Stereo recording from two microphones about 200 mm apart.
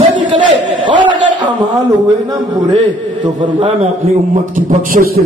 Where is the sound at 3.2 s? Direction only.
25° right (ahead or behind).